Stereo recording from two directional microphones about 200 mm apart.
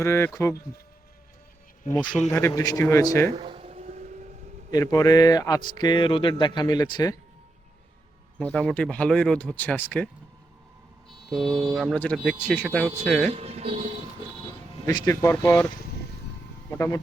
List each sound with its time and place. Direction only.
0.0 s speech: 15° left (ahead or behind)
1.9 s speech: 20° left (ahead or behind)
3.3 s a sound: 30° right (ahead or behind)
4.7 s speech: 20° left (ahead or behind)
8.4 s speech: 5° left (ahead or behind)
11.3 s speech: centre (ahead or behind)
13.3 s speech: 30° right (ahead or behind)
14.8 s speech: 15° left (ahead or behind)
16.7 s speech: 15° left (ahead or behind)